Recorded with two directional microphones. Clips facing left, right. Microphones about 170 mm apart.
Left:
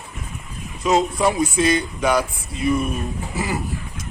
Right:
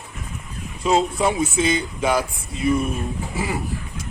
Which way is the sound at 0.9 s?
30° right (ahead or behind).